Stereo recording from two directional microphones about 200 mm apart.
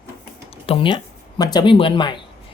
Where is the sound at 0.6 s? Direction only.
25° left (ahead or behind).